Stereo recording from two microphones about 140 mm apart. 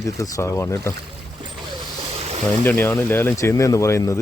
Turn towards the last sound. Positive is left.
turn(degrees=20)  # may be behind; listen again after turning